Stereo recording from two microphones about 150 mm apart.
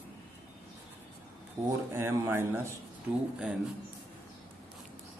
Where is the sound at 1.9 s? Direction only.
15° right (ahead or behind).